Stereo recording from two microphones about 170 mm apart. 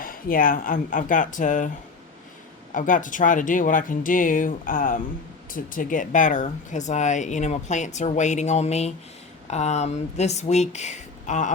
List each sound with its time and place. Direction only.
0.0 s speech: 55° left (ahead or behind)
2.7 s speech: 50° left (ahead or behind)